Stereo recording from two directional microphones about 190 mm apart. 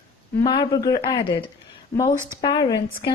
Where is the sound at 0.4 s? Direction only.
25° left (ahead or behind).